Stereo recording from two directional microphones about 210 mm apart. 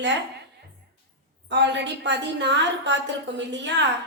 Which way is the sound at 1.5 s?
55° right (ahead or behind).